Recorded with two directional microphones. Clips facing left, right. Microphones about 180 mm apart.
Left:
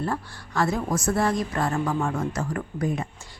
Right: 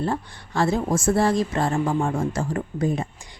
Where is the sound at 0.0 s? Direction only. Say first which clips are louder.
Right 3 dB; 20° right (ahead or behind).